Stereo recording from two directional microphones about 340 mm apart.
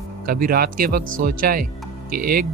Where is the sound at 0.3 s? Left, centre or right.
Right.